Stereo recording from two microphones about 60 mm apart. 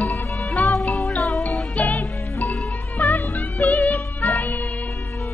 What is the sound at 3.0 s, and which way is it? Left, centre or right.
Music, left.